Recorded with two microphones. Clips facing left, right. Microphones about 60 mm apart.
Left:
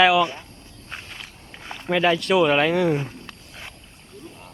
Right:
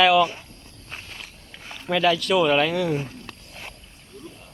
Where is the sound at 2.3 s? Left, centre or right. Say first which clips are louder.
Left 2 dB; centre.